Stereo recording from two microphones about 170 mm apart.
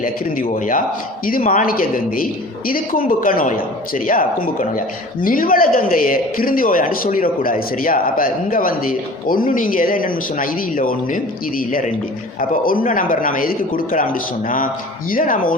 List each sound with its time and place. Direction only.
0.0 s a man's voice: 55° left (ahead or behind)
12.4 s a man's voice: 55° left (ahead or behind)